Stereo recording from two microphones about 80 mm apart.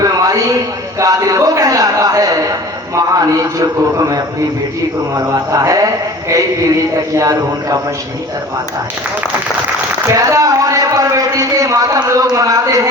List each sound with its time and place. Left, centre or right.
0.0 s a sound: right
2.9 s a man's voice: right
7.2 s a man's voice: right
10.2 s a man's voice: right